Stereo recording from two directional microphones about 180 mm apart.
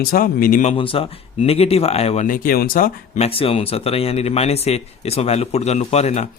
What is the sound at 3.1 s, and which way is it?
Speech, 35° left (ahead or behind).